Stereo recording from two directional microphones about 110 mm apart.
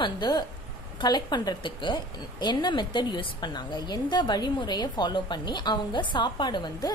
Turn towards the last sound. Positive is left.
turn(degrees=40)  # may be behind; listen again after turning